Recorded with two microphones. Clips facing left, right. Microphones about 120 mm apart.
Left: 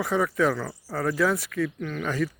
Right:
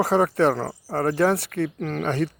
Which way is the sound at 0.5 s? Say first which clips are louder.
Right 5 dB; 40° right (ahead or behind).